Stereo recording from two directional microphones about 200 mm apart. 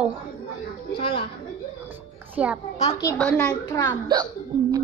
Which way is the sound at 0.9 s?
25° left (ahead or behind).